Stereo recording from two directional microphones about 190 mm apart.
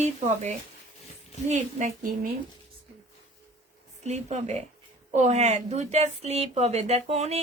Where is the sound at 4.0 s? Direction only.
35° right (ahead or behind).